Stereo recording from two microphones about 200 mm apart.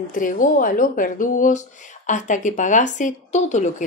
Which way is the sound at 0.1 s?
40° left (ahead or behind).